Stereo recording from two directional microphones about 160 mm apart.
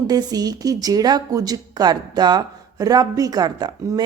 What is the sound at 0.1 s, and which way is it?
A woman's voice, 25° right (ahead or behind).